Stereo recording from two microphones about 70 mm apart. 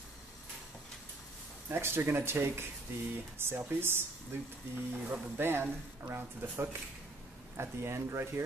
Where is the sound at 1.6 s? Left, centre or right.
Right.